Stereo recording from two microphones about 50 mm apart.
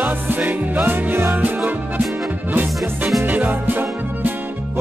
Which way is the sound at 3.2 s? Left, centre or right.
Right.